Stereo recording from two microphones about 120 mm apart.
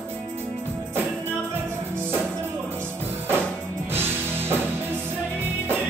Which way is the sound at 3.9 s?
20° right (ahead or behind).